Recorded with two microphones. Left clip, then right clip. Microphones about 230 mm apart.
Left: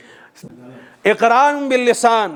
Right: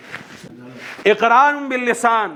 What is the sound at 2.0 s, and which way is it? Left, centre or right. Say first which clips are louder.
Speech: right 1 dB; left.